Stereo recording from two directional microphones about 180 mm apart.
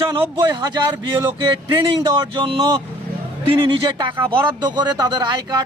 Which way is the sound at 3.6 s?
25° right (ahead or behind).